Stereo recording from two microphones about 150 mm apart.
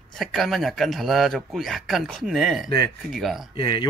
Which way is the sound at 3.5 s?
30° left (ahead or behind).